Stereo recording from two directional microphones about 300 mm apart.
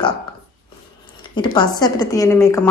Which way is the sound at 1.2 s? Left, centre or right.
Centre.